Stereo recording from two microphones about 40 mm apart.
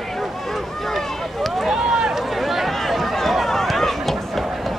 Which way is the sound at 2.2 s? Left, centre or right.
Centre.